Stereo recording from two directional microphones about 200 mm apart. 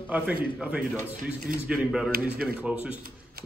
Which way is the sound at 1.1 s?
45° right (ahead or behind).